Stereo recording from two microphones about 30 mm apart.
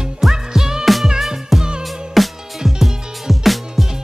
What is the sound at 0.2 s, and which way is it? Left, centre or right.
Music, centre.